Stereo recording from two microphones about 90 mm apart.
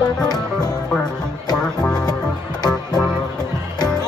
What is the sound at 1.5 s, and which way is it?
Music, 10° left (ahead or behind).